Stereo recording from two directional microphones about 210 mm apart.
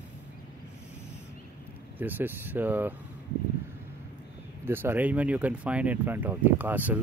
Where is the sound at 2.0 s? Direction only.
10° right (ahead or behind).